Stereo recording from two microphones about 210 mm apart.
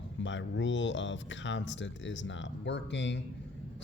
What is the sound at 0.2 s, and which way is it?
Speech, 60° left (ahead or behind).